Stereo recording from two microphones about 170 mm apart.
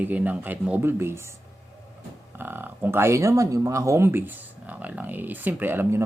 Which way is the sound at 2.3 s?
10° right (ahead or behind).